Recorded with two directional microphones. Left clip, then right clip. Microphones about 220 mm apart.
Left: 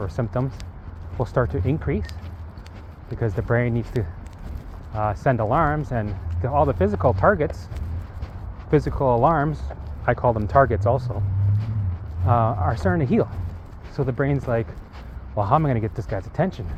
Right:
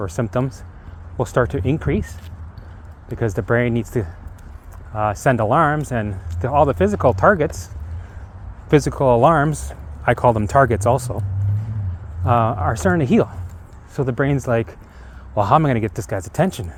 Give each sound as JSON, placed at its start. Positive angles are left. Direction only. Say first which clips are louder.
{"t": 0.0, "sound": "speech", "louder": "right 5 dB", "side_deg": -55}
{"t": 3.2, "sound": "speech", "louder": "right 4 dB", "side_deg": -55}
{"t": 8.7, "sound": "speech", "louder": "right 5 dB", "side_deg": -55}
{"t": 12.2, "sound": "speech", "louder": "right 4 dB", "side_deg": -50}